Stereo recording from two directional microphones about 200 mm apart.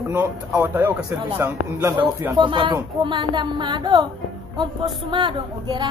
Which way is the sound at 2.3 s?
25° right (ahead or behind).